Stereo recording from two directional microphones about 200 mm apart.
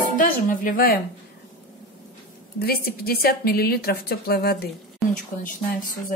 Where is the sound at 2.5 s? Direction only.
50° left (ahead or behind).